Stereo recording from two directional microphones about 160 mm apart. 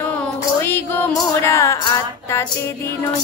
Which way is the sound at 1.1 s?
20° left (ahead or behind).